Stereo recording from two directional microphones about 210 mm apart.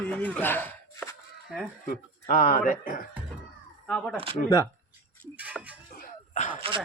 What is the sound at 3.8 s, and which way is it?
Speech, 5° left (ahead or behind).